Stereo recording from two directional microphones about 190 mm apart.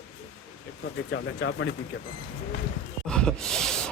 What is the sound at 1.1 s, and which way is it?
Speech, 75° left (ahead or behind).